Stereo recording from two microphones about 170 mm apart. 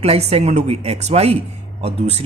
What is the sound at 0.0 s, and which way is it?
Speech, 35° right (ahead or behind).